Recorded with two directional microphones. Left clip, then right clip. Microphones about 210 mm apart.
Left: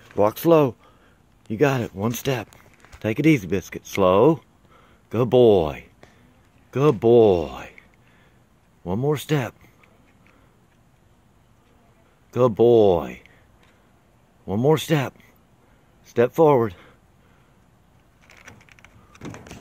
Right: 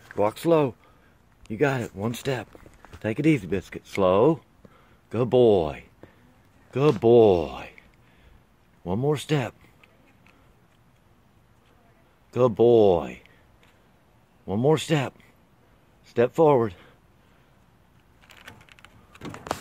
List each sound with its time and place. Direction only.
0.2 s speech: 20° left (ahead or behind)
6.7 s speech: centre (ahead or behind)
8.8 s speech: centre (ahead or behind)
12.3 s speech: 5° left (ahead or behind)
14.4 s speech: 5° left (ahead or behind)